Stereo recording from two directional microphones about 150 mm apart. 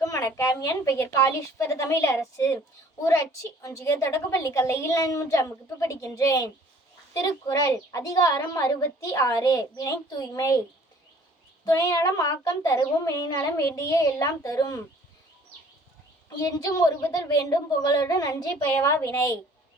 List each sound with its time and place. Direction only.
0.0 s a woman's voice: 20° left (ahead or behind)
11.6 s a woman's voice: 25° left (ahead or behind)
16.4 s a woman's voice: 25° left (ahead or behind)